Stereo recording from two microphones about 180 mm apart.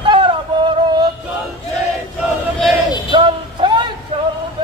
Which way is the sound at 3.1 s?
25° right (ahead or behind).